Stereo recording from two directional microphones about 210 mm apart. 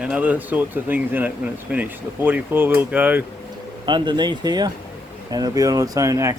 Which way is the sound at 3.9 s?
20° right (ahead or behind).